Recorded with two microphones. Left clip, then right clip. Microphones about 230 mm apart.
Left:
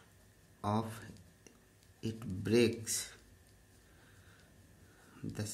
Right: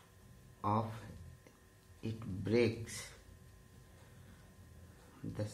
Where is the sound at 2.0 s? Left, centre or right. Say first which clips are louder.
Left 2 dB; left.